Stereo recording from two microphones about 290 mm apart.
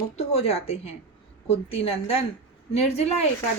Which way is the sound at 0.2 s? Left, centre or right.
Left.